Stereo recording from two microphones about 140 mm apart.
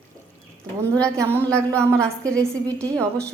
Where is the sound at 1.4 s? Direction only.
10° left (ahead or behind).